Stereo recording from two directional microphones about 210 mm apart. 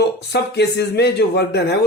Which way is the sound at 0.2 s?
50° left (ahead or behind).